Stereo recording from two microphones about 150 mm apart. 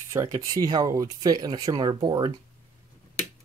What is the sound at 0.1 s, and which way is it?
Speech, 20° right (ahead or behind).